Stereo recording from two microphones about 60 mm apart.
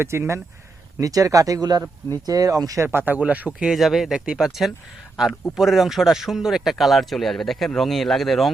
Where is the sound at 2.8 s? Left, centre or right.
Right.